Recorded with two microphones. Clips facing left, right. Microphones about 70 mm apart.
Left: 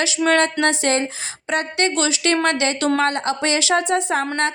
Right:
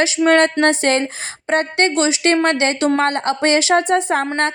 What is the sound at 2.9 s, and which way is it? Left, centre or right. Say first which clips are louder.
Speech: right 2 dB; right.